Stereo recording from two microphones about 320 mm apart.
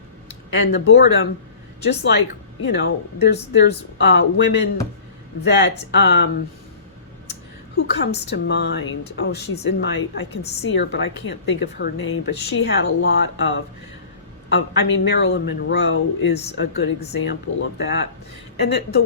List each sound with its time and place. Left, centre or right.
0.5 s speech: left
2.6 s speech: left
7.8 s speech: left